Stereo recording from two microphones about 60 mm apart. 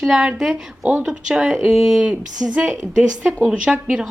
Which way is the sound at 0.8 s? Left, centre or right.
Right.